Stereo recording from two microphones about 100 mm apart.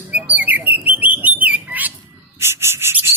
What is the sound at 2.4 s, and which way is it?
Cricket, 25° right (ahead or behind).